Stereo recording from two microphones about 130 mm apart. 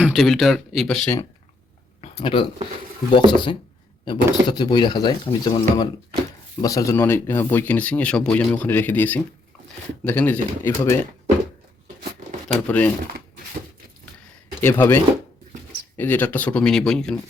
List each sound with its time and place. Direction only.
0.0 s speech: centre (ahead or behind)
2.0 s a sound: 45° left (ahead or behind)
3.2 s speech: 35° left (ahead or behind); by 10.9 s 15° left (ahead or behind)
12.5 s speech: 10° left (ahead or behind)
14.6 s speech: 15° left (ahead or behind)